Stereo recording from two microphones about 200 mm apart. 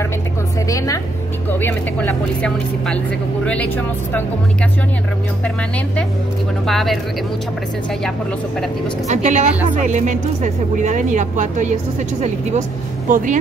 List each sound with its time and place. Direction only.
0.7 s vehicle: 15° left (ahead or behind)
1.5 s speech: 10° left (ahead or behind)
6.6 s speech: centre (ahead or behind)
9.1 s speech: 35° right (ahead or behind)